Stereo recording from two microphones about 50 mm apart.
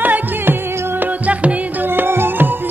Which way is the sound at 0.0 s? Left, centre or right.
Right.